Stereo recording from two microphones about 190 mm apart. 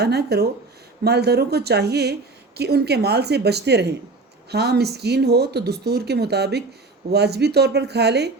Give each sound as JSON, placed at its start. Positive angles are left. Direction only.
{"t": 0.0, "sound": "speech", "side_deg": -60}